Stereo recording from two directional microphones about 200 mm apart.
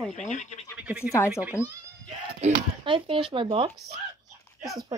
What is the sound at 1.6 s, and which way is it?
Speech, 15° left (ahead or behind).